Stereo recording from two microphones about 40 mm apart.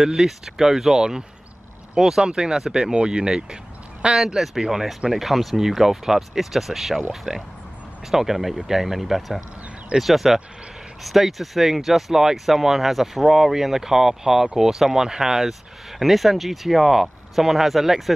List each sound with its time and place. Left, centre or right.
0.0 s speech: centre
16.0 s speech: centre